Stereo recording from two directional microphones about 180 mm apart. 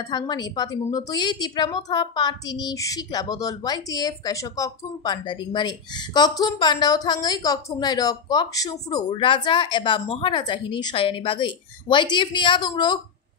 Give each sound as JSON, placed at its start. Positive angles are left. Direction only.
{"t": 0.1, "sound": "a woman's voice", "side_deg": 25}